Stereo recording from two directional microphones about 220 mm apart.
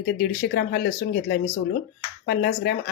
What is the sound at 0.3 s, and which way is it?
Speech, 45° left (ahead or behind).